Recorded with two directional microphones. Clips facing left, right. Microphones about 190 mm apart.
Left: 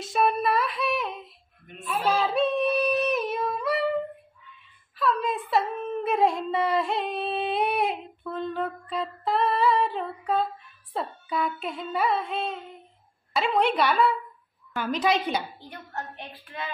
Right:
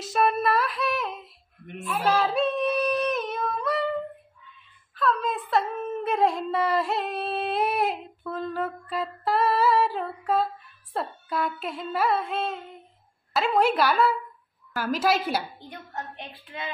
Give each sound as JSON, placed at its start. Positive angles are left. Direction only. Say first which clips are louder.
{"t": 0.0, "sound": "female singing", "louder": "even", "side_deg": 0}
{"t": 4.9, "sound": "a woman's voice", "louder": "even", "side_deg": 0}
{"t": 15.7, "sound": "a woman's voice", "louder": "even", "side_deg": -20}